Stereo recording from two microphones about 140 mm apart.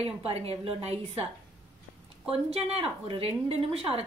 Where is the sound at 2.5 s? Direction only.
40° right (ahead or behind).